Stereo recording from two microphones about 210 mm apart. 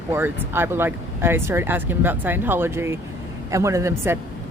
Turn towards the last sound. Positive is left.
turn(degrees=-15)  # may be behind; listen again after turning